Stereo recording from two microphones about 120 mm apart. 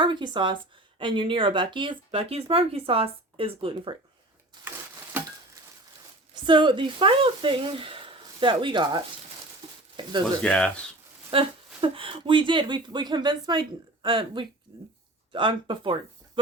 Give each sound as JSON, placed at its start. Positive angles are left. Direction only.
{"t": 0.0, "sound": "speech", "side_deg": -40}
{"t": 6.3, "sound": "speech", "side_deg": -40}
{"t": 10.4, "sound": "speech", "side_deg": 10}
{"t": 11.3, "sound": "speech", "side_deg": -50}